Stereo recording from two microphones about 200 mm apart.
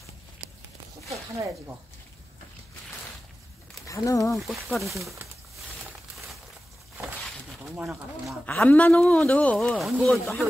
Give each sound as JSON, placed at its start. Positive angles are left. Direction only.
{"t": 1.1, "sound": "speech", "side_deg": -15}
{"t": 3.8, "sound": "speech", "side_deg": 15}
{"t": 4.5, "sound": "speech", "side_deg": 0}
{"t": 7.7, "sound": "speech", "side_deg": -5}